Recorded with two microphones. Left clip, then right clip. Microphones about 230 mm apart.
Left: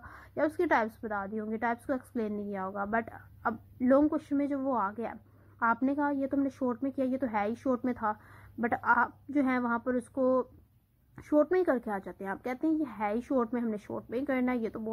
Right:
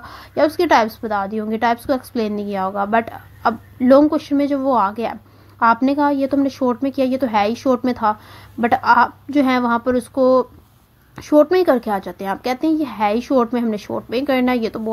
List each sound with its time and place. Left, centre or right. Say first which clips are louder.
0.0 s a woman's voice: right 14 dB; right